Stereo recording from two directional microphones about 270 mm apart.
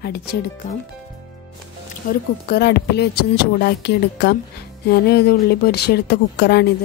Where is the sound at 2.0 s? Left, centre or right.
Left.